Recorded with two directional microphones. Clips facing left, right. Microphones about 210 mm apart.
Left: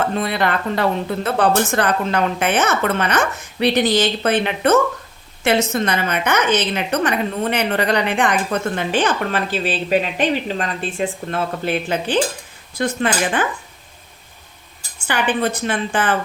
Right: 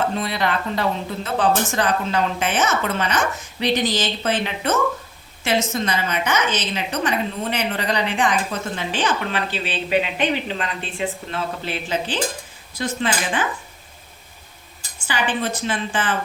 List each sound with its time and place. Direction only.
0.2 s a woman's voice: 55° left (ahead or behind)
15.0 s a woman's voice: 55° left (ahead or behind)